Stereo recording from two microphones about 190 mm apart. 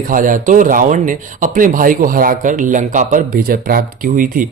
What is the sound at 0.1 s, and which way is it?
Speech, 45° right (ahead or behind).